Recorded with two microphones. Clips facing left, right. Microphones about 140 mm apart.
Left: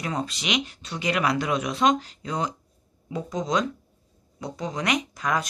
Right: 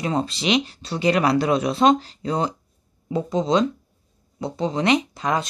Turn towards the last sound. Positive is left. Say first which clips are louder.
# right 3 dB
turn(degrees=-25)  # may be behind; listen again after turning